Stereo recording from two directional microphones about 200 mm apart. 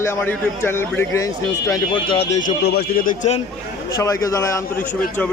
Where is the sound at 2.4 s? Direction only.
50° left (ahead or behind).